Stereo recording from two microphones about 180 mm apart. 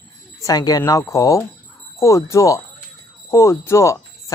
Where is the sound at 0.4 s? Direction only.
20° left (ahead or behind).